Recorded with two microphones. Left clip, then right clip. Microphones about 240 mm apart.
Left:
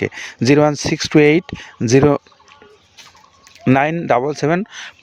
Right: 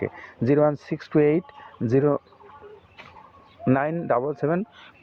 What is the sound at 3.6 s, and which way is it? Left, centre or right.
Speech, left.